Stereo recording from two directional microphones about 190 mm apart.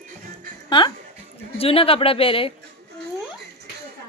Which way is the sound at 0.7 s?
25° left (ahead or behind).